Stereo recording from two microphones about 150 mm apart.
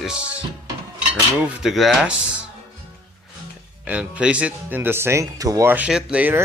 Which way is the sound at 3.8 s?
10° right (ahead or behind).